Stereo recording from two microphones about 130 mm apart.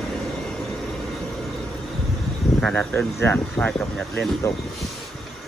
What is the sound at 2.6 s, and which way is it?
Speech, 10° left (ahead or behind).